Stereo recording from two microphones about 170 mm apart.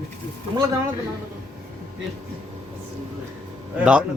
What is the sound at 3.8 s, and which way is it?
Speech, 5° right (ahead or behind).